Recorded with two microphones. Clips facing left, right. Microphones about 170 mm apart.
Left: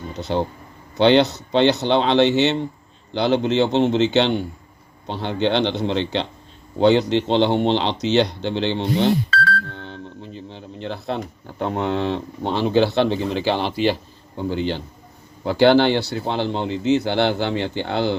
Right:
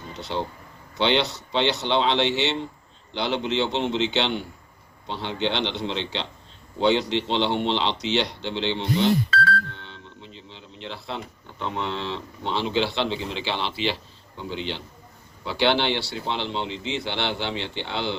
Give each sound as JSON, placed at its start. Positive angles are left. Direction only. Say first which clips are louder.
{"t": 0.2, "sound": "a man's voice", "louder": "left 6 dB", "side_deg": 50}
{"t": 9.7, "sound": "telephone dialing", "louder": "left 9 dB", "side_deg": 50}
{"t": 11.6, "sound": "a man's voice", "louder": "left 7 dB", "side_deg": 50}